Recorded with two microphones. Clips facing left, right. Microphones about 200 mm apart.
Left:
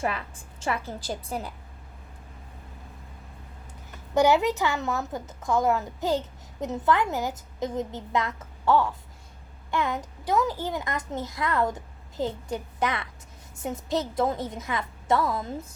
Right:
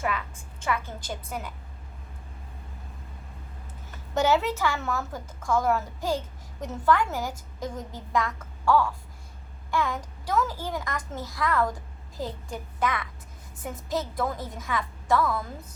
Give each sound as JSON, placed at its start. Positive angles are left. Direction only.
{"t": 0.0, "sound": "a woman's voice", "side_deg": 30}
{"t": 4.1, "sound": "a child's voice", "side_deg": 15}